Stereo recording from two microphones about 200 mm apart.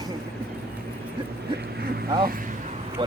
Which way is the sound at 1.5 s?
50° right (ahead or behind).